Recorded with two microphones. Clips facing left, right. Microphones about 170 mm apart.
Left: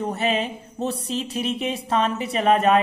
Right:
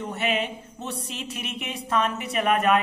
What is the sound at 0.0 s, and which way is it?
Music, 35° left (ahead or behind).